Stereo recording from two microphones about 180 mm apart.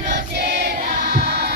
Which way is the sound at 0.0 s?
70° right (ahead or behind).